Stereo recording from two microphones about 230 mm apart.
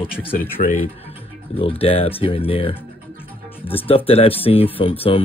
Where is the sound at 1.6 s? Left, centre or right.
Left.